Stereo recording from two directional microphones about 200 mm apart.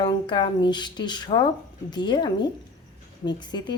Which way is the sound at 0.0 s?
20° left (ahead or behind).